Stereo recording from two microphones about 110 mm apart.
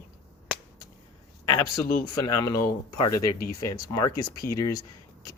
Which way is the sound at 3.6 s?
30° left (ahead or behind).